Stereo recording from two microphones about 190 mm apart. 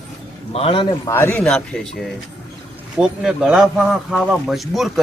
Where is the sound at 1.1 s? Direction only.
10° left (ahead or behind).